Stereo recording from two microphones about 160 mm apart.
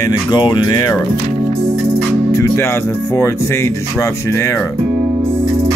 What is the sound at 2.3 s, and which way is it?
Speech, 20° left (ahead or behind).